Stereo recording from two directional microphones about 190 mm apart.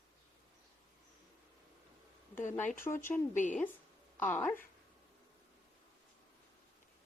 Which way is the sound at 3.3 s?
40° left (ahead or behind).